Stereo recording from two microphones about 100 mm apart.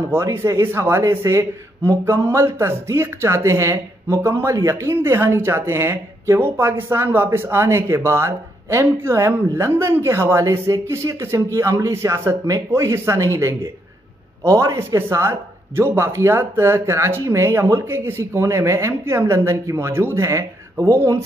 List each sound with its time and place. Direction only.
0.1 s speech: 25° right (ahead or behind)